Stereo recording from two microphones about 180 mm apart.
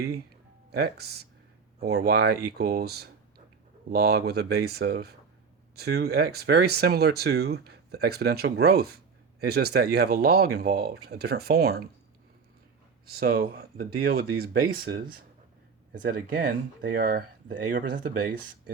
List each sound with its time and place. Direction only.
0.7 s speech: 60° right (ahead or behind)
13.1 s speech: 60° right (ahead or behind)